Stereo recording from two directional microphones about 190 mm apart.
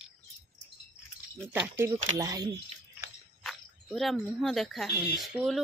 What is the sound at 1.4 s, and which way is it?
Speech, 10° right (ahead or behind).